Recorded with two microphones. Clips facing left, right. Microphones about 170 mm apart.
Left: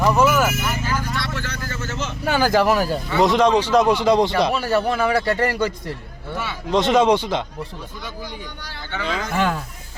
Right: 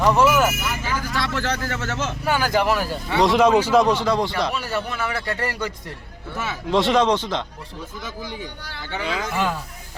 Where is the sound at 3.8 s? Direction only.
15° left (ahead or behind).